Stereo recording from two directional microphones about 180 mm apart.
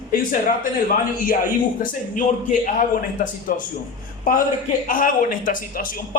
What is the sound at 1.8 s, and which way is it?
A man's voice, 50° left (ahead or behind).